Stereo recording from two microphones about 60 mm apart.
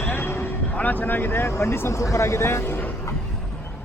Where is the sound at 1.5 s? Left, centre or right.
Left.